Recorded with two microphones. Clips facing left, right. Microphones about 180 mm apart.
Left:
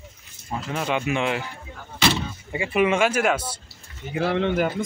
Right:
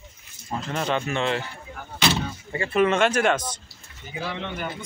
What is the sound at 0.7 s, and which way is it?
Speech, 10° left (ahead or behind).